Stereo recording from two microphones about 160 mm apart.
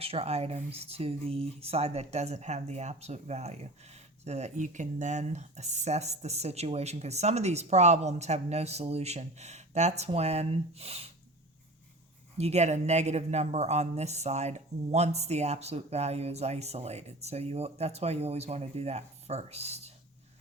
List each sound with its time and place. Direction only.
0.0 s speech: 40° right (ahead or behind)
12.4 s speech: 40° right (ahead or behind)